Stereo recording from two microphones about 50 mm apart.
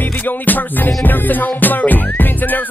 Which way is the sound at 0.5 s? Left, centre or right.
Left.